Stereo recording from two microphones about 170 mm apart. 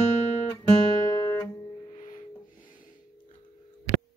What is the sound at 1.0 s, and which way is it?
Music, 20° left (ahead or behind).